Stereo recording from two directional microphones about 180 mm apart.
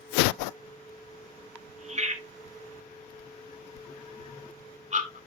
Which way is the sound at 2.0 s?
40° right (ahead or behind).